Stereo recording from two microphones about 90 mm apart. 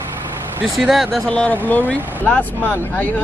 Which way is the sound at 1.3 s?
15° left (ahead or behind).